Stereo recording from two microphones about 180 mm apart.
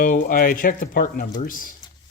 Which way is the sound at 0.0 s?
50° left (ahead or behind).